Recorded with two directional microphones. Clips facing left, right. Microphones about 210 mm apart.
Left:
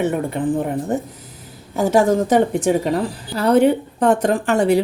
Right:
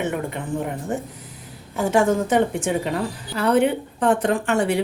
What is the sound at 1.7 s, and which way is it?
A woman's voice, 40° left (ahead or behind).